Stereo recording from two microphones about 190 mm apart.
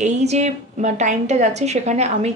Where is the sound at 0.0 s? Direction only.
35° right (ahead or behind).